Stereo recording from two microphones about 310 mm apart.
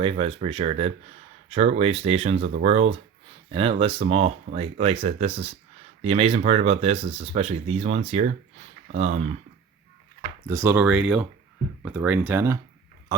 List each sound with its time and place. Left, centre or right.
0.0 s speech: centre
10.4 s speech: centre